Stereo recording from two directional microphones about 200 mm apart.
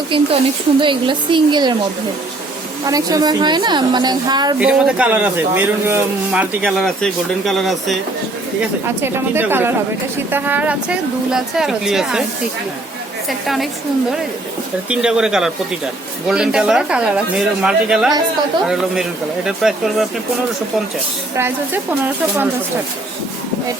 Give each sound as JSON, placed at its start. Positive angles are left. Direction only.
{"t": 0.1, "sound": "a woman's voice", "side_deg": -25}
{"t": 2.8, "sound": "a woman's voice", "side_deg": -20}
{"t": 4.6, "sound": "a man's voice", "side_deg": -5}
{"t": 9.0, "sound": "a man's voice", "side_deg": -10}
{"t": 13.2, "sound": "a man's voice", "side_deg": 0}
{"t": 14.8, "sound": "a man's voice", "side_deg": -5}
{"t": 21.3, "sound": "speech", "side_deg": -10}